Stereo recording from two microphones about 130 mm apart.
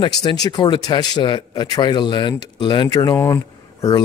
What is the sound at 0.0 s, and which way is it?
Speech, 35° left (ahead or behind).